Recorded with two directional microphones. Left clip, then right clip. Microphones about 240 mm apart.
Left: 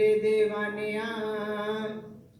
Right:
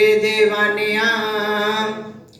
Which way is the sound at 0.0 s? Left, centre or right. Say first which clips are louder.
Right 9 dB; right.